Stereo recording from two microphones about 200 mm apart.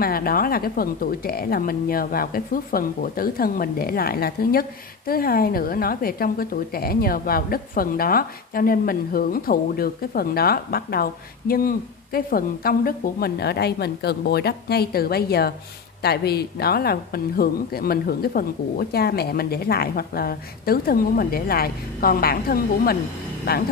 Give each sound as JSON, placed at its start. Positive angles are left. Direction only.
{"t": 0.0, "sound": "a woman's voice", "side_deg": 50}